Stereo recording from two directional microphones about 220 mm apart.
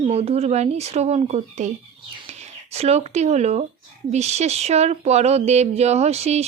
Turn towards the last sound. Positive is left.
turn(degrees=-30)  # may be behind; listen again after turning